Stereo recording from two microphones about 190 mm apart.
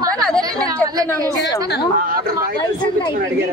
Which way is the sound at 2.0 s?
50° right (ahead or behind).